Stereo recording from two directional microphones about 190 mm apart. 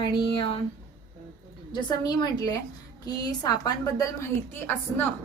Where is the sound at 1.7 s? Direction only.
20° left (ahead or behind).